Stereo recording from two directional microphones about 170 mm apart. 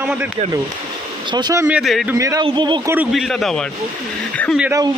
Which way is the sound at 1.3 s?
25° right (ahead or behind).